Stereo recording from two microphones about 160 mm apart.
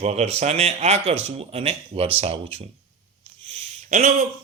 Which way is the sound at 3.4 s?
45° right (ahead or behind).